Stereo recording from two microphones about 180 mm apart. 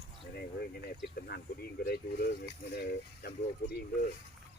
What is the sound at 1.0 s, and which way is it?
Speech, 60° left (ahead or behind).